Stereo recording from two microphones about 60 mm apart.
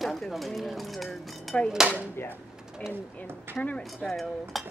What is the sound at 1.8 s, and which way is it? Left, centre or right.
Speech, centre.